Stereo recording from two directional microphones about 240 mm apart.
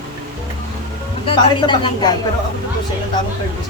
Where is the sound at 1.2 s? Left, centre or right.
Centre.